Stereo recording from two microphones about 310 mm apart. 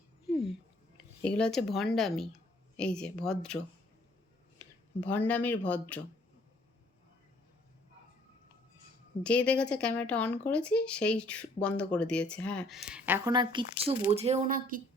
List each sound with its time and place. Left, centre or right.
1.2 s speech: centre
5.0 s speech: centre
9.2 s speech: centre
14.2 s speech: right